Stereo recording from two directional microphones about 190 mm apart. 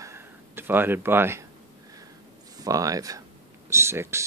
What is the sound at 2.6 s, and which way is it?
Speech, 20° right (ahead or behind).